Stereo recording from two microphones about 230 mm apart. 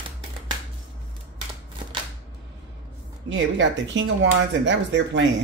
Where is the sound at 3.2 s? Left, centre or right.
Right.